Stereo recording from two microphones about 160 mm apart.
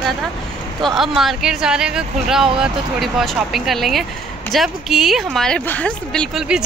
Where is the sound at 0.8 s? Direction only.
Centre (ahead or behind).